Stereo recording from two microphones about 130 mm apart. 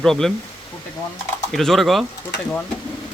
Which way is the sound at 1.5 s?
Centre (ahead or behind).